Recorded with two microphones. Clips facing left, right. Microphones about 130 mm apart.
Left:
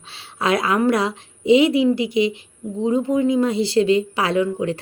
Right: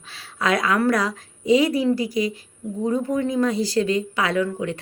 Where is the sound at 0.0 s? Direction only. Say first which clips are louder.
Left 2 dB; 30° left (ahead or behind).